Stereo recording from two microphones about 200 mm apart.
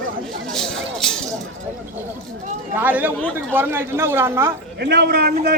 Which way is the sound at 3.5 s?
10° right (ahead or behind).